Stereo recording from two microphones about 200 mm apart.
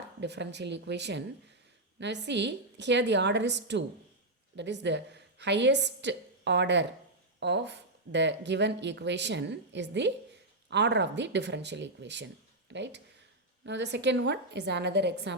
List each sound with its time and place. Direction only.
0.2 s a woman's voice: 60° right (ahead or behind)